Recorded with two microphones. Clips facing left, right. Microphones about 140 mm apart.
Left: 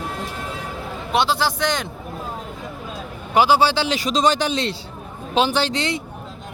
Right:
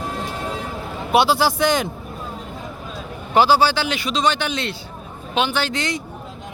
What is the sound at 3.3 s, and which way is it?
Speech, 15° left (ahead or behind).